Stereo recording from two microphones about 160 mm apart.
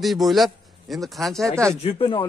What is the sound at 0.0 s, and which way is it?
Speech, centre (ahead or behind).